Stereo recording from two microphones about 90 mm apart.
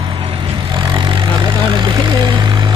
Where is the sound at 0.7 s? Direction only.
60° right (ahead or behind).